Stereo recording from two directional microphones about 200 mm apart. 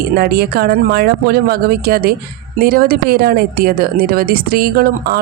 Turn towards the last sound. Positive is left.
turn(degrees=-50)  # may be behind; listen again after turning